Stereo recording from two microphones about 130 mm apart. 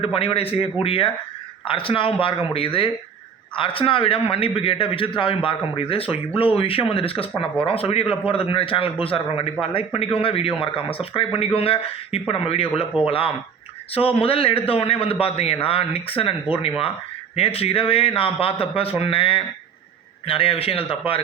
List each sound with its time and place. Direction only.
0.0 s speech: 45° left (ahead or behind)